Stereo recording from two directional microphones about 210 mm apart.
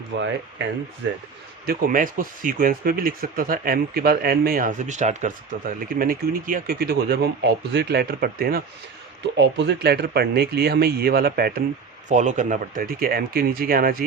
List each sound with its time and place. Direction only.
0.1 s speech: 60° right (ahead or behind)
1.6 s speech: 40° right (ahead or behind)
9.2 s speech: 55° right (ahead or behind)
12.0 s speech: 35° right (ahead or behind)